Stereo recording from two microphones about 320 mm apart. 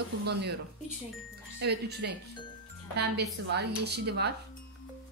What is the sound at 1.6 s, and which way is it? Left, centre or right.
A woman's voice, right.